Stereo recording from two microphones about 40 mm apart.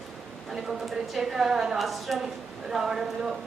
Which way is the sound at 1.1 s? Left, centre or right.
Centre.